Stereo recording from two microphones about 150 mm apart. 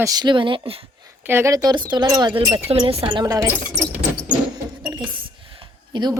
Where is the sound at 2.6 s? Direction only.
40° right (ahead or behind); by 3.5 s 25° right (ahead or behind).